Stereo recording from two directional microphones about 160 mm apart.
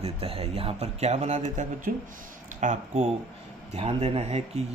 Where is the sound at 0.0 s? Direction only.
35° right (ahead or behind).